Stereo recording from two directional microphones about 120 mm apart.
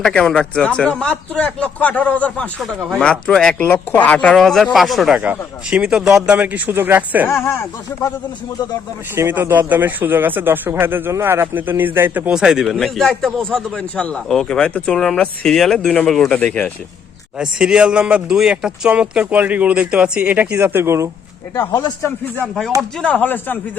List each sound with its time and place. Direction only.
0.0 s speech: 5° left (ahead or behind); by 7.3 s 15° right (ahead or behind)
7.4 s speech: 20° left (ahead or behind)
9.1 s speech: 20° right (ahead or behind); by 16.7 s 10° left (ahead or behind)
17.3 s speech: 5° right (ahead or behind); by 21.1 s 20° right (ahead or behind)
21.7 s speech: 35° left (ahead or behind)
22.8 s speech: 5° left (ahead or behind)